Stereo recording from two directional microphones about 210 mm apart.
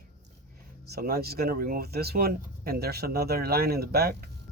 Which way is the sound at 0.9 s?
50° right (ahead or behind).